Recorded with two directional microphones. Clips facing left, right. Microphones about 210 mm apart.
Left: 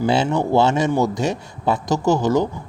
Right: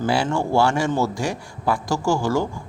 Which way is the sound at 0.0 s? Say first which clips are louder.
Left 3 dB; 20° left (ahead or behind).